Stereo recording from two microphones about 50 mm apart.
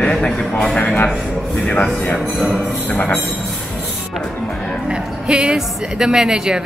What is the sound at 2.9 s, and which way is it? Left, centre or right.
Train, left.